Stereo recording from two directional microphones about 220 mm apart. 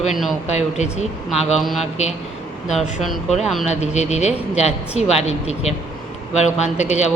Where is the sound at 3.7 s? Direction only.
30° left (ahead or behind).